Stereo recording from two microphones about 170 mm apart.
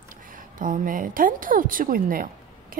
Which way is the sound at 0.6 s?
55° right (ahead or behind).